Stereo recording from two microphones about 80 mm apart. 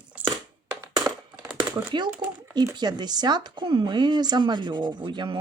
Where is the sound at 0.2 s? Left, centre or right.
Centre.